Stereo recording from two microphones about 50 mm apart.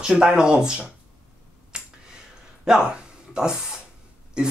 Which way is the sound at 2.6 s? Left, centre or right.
Centre.